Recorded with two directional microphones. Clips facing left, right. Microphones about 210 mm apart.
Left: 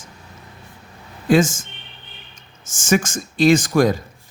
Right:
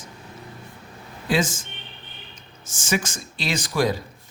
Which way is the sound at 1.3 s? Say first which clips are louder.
Left 7 dB; 50° left (ahead or behind).